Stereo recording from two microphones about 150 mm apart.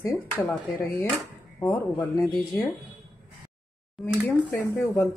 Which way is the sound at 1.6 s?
15° left (ahead or behind).